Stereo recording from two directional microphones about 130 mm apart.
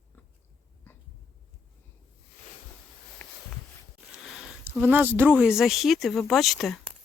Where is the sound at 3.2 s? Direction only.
15° left (ahead or behind).